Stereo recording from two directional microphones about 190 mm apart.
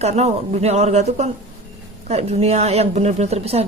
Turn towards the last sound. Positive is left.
turn(degrees=-35)  # may be behind; listen again after turning